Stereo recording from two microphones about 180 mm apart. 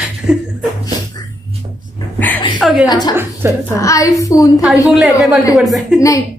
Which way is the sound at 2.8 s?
20° left (ahead or behind).